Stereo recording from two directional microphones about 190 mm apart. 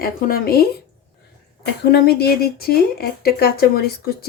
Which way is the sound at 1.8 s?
60° left (ahead or behind).